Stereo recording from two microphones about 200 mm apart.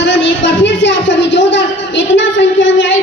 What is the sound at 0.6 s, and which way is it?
A man's voice, 65° left (ahead or behind).